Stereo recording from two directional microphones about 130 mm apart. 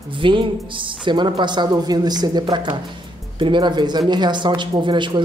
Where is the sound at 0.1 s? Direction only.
40° right (ahead or behind).